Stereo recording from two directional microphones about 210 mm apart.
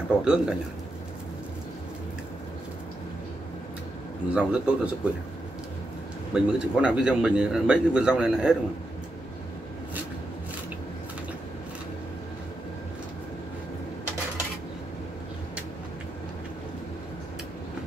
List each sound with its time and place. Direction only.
0.2 s a man's voice: 5° right (ahead or behind)
4.3 s a man's voice: 5° right (ahead or behind)
6.3 s a man's voice: 5° right (ahead or behind)